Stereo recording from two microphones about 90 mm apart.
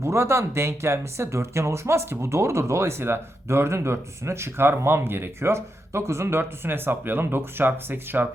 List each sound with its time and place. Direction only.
0.0 s speech: 30° right (ahead or behind)